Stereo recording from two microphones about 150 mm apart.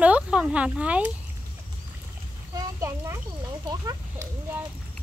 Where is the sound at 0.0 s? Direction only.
10° right (ahead or behind).